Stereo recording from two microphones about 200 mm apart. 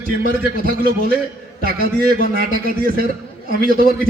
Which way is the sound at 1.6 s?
50° right (ahead or behind).